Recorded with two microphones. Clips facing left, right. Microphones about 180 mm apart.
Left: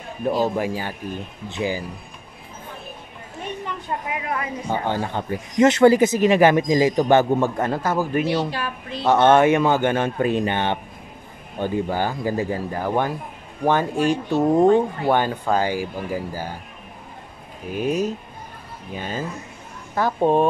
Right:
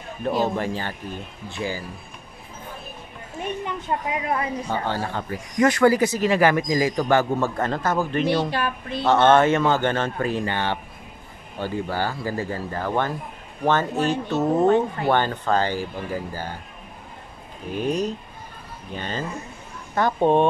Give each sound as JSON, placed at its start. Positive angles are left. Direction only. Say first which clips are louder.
{"t": 0.2, "sound": "speech", "louder": "left 2 dB", "side_deg": 10}
{"t": 3.6, "sound": "speech", "louder": "right 1 dB", "side_deg": -30}
{"t": 4.6, "sound": "speech", "louder": "left 2 dB", "side_deg": 15}
{"t": 17.7, "sound": "speech", "louder": "left 2 dB", "side_deg": 5}